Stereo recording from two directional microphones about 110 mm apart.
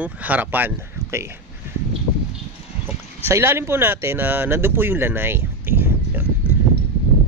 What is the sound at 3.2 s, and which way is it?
Speech, 25° right (ahead or behind).